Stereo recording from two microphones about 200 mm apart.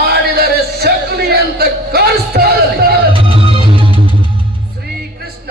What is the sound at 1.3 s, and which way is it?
Music, 50° right (ahead or behind).